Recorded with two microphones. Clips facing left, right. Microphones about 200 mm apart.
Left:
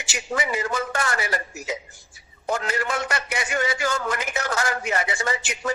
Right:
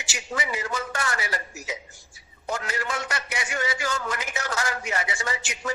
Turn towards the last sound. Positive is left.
turn(degrees=55)  # may be behind; listen again after turning